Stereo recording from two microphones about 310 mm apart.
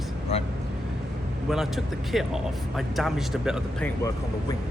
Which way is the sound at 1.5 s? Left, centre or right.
Centre.